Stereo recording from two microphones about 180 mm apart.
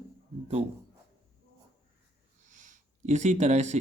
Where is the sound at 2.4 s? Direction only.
45° right (ahead or behind).